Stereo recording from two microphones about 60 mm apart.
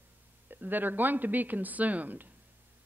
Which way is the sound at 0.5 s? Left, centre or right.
Right.